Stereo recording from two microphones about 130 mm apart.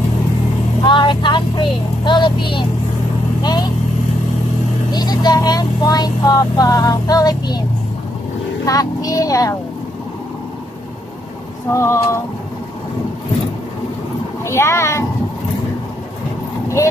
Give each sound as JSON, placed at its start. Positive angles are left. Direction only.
{"t": 0.8, "sound": "speech", "side_deg": 40}
{"t": 4.9, "sound": "speech", "side_deg": 30}
{"t": 8.6, "sound": "speech", "side_deg": 25}
{"t": 11.7, "sound": "speech", "side_deg": 20}
{"t": 14.4, "sound": "speech", "side_deg": 20}
{"t": 16.6, "sound": "vehicle", "side_deg": 25}